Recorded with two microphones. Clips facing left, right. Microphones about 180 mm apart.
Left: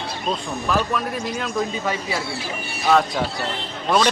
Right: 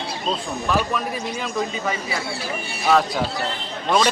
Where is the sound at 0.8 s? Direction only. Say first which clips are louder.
Left 1 dB; centre (ahead or behind).